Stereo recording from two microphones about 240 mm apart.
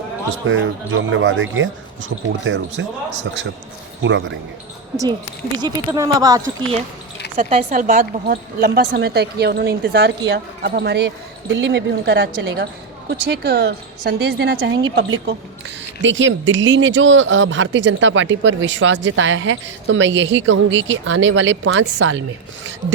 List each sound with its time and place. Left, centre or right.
0.4 s speech: right
4.0 s speech: right
5.5 s speech: centre
7.3 s speech: right